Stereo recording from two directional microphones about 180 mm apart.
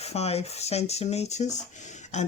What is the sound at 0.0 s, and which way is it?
Speech, 35° left (ahead or behind).